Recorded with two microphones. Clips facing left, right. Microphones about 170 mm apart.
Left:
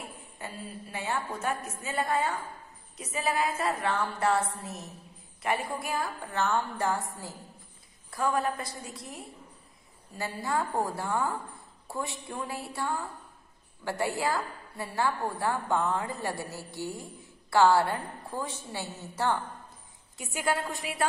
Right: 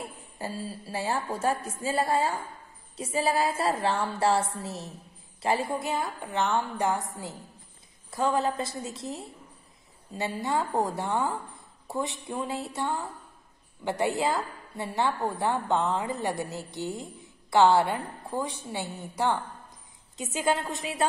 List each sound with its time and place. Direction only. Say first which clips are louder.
0.0 s a woman's voice: right 5 dB; 35° right (ahead or behind)